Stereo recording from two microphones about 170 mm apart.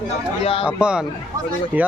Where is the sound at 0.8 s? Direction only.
5° right (ahead or behind).